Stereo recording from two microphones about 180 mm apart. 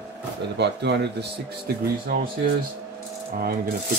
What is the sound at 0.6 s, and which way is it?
Speech, 70° right (ahead or behind).